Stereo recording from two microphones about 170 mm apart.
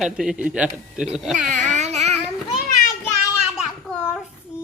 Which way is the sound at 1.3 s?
50° right (ahead or behind).